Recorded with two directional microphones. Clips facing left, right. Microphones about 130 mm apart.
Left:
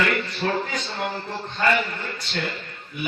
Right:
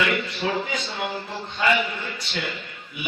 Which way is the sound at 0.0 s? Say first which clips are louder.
Left 1 dB; 50° left (ahead or behind).